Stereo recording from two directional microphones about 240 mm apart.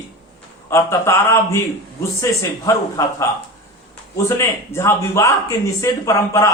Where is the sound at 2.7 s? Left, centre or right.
Centre.